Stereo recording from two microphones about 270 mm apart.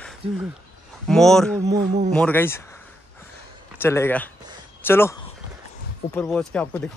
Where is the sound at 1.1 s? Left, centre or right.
Centre.